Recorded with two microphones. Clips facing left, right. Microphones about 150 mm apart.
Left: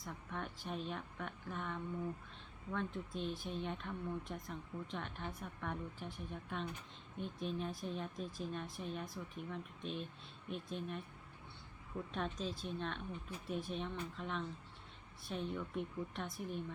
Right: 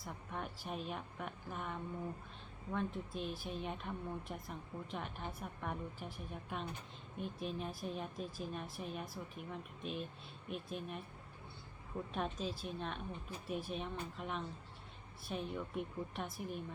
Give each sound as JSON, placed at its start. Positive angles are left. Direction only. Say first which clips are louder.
{"t": 0.0, "sound": "speech", "louder": "right 1 dB", "side_deg": -5}
{"t": 12.1, "sound": "speech", "louder": "right 1 dB", "side_deg": -5}